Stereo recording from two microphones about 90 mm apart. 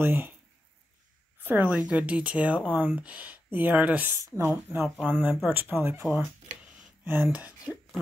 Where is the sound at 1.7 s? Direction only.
10° right (ahead or behind).